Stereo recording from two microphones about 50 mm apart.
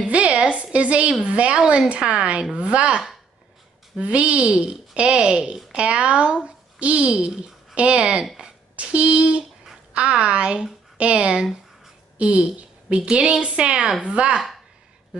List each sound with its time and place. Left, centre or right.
0.0 s a sound: right
1.2 s speech: right
4.0 s speech: right
13.0 s a woman's voice: centre